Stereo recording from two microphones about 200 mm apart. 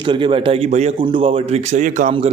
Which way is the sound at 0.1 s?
25° right (ahead or behind).